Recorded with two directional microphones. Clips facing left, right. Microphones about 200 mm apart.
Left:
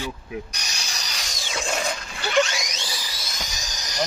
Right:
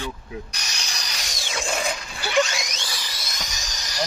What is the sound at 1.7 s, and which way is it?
Dog, centre (ahead or behind).